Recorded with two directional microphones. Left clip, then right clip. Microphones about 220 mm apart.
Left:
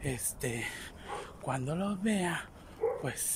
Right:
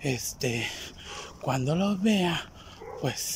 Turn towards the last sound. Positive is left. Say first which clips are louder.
# even
turn(degrees=-5)  # may be behind; listen again after turning